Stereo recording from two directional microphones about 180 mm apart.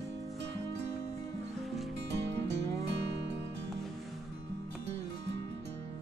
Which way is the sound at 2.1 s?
75° right (ahead or behind).